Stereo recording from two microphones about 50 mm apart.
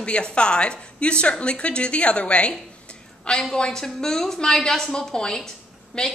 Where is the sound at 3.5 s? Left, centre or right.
Centre.